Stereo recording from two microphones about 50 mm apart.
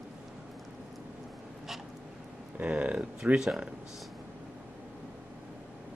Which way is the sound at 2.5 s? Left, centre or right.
Right.